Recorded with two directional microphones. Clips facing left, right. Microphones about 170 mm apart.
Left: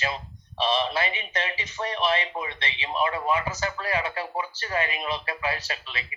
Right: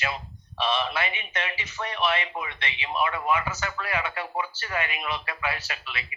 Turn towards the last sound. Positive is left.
turn(degrees=35)  # may be behind; listen again after turning